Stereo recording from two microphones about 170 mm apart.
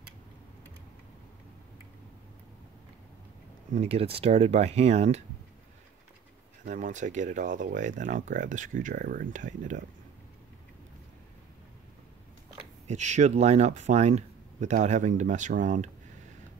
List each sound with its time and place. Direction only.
3.7 s speech: 40° right (ahead or behind)
6.6 s speech: 45° right (ahead or behind)
12.8 s speech: 45° right (ahead or behind)